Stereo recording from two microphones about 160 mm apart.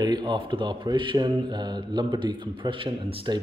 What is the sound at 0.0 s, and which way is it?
A man's voice, 25° right (ahead or behind).